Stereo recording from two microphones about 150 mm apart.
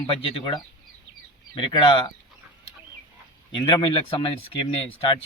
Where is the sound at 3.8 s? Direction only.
35° left (ahead or behind).